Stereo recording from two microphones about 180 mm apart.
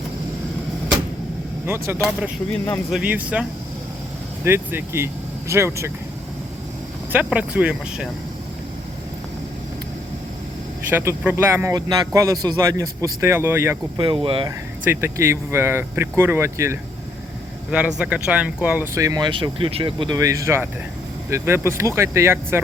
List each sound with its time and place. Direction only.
1.6 s speech: 10° right (ahead or behind)
2.5 s speech: 10° left (ahead or behind)
2.9 s speech: 10° right (ahead or behind)
4.4 s speech: 15° right (ahead or behind)
7.1 s speech: 10° right (ahead or behind)
10.8 s speech: 10° right (ahead or behind)
14.0 s speech: 30° right (ahead or behind)
14.8 s speech: 15° right (ahead or behind)